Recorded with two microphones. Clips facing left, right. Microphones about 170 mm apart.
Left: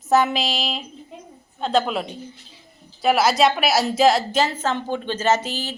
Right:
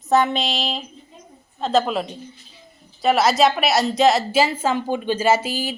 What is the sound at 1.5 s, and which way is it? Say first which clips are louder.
A woman's voice: right 1 dB; centre (ahead or behind).